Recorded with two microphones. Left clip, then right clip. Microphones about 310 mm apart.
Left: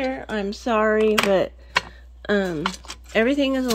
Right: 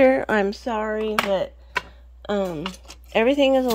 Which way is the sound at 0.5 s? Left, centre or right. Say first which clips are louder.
Left 5 dB; centre.